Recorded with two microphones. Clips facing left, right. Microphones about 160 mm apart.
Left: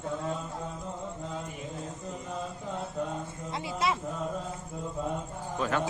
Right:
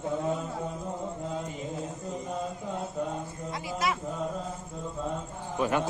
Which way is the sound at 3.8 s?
25° left (ahead or behind).